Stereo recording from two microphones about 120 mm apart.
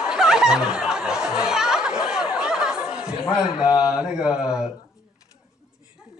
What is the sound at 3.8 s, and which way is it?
Speech, 5° right (ahead or behind).